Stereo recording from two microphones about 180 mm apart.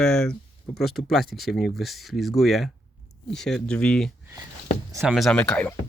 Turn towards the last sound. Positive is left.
turn(degrees=5)  # may be behind; listen again after turning